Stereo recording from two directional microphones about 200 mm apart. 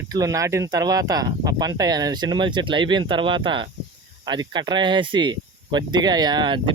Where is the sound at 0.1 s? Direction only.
15° right (ahead or behind).